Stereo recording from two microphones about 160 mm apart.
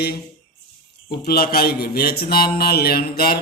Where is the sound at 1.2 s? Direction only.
75° left (ahead or behind).